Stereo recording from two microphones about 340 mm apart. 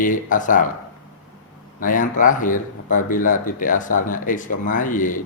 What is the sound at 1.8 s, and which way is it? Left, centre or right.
Speech, left.